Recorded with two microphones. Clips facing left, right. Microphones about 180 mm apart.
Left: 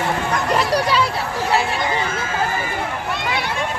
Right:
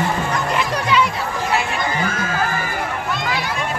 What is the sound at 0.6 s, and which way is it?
Children playing, 35° left (ahead or behind).